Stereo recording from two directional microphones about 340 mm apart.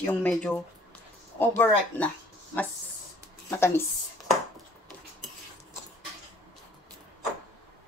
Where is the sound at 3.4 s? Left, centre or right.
Centre.